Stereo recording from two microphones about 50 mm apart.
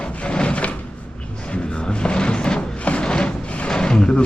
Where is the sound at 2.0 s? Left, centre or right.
Left.